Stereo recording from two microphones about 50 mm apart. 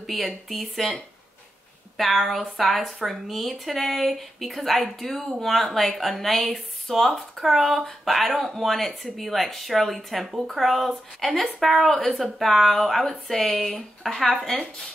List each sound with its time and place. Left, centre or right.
0.0 s speech: centre